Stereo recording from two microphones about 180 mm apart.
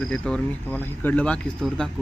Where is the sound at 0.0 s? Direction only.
5° left (ahead or behind).